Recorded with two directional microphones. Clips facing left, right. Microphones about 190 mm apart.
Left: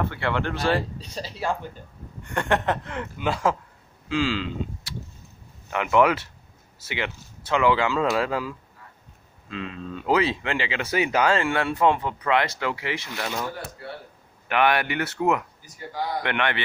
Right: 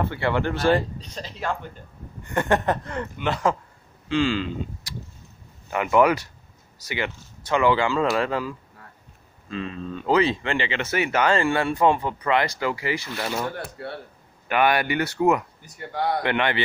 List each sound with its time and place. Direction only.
0.1 s a man's voice: 10° right (ahead or behind); by 1.6 s 10° left (ahead or behind)
2.2 s speech: centre (ahead or behind)
5.7 s a man's voice: 5° right (ahead or behind)
14.5 s speech: centre (ahead or behind)
15.6 s speech: 65° right (ahead or behind)
16.2 s a man's voice: 5° right (ahead or behind)